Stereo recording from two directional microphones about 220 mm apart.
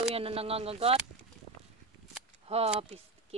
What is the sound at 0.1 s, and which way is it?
Speech, 25° right (ahead or behind).